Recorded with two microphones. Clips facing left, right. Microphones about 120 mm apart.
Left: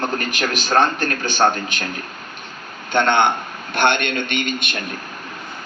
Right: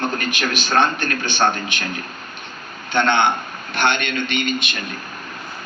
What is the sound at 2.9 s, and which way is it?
A man's voice, 45° left (ahead or behind).